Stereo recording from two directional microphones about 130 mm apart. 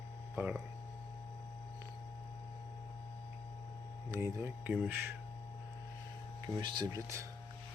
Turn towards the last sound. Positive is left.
turn(degrees=-35)  # may be behind; listen again after turning